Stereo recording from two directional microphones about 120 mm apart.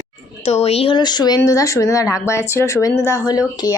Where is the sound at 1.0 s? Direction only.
35° left (ahead or behind).